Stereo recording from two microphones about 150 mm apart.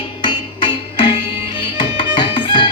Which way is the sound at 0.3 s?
35° left (ahead or behind).